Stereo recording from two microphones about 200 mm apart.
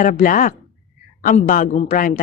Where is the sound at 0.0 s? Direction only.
40° left (ahead or behind).